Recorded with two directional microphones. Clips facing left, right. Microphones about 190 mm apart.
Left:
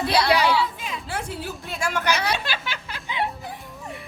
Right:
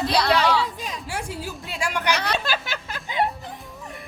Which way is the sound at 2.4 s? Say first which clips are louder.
Right 3 dB; 40° right (ahead or behind).